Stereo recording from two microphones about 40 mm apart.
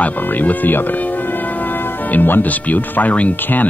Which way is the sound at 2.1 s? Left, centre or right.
Left.